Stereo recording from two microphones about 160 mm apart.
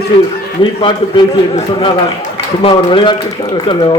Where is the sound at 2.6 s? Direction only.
35° left (ahead or behind).